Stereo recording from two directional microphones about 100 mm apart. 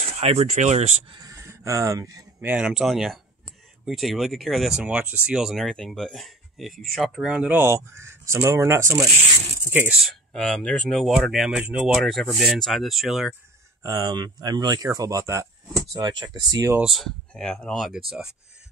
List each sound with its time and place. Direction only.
0.0 s speech: 90° right
1.3 s speech: 30° right (ahead or behind)
2.4 s speech: 15° right (ahead or behind)
2.7 s speech: centre (ahead or behind); by 9.1 s 30° right (ahead or behind)
9.7 s speech: 15° right (ahead or behind)
9.9 s speech: centre (ahead or behind)
11.6 s speech: 15° right (ahead or behind)
11.9 s speech: centre (ahead or behind)
13.8 s speech: 40° right (ahead or behind)
15.9 s speech: 40° right (ahead or behind)
16.8 s speech: centre (ahead or behind)